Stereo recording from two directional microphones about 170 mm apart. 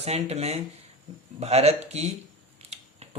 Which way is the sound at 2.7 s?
40° right (ahead or behind).